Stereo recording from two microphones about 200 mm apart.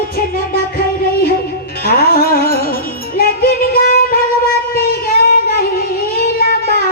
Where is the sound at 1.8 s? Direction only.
50° left (ahead or behind).